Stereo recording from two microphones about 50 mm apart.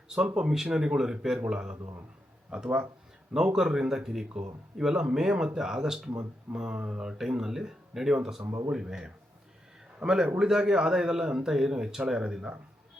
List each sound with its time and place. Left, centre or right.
0.3 s a man's voice: centre